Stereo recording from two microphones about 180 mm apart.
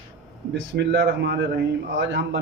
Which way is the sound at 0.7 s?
75° right (ahead or behind).